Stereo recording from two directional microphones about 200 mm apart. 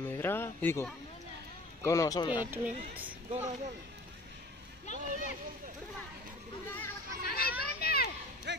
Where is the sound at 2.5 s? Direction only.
10° right (ahead or behind).